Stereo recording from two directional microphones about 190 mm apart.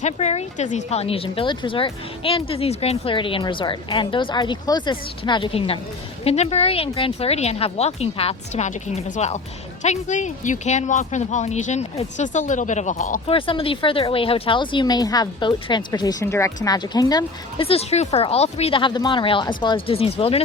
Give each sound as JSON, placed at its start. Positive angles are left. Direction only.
{"t": 0.0, "sound": "speech", "side_deg": 35}
{"t": 13.2, "sound": "speech", "side_deg": 30}